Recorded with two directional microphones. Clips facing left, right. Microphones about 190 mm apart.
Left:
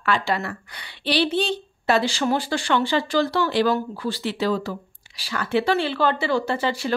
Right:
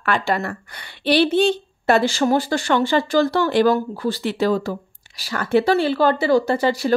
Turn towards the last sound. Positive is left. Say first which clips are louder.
# right 5 dB
turn(degrees=-40)  # may be behind; listen again after turning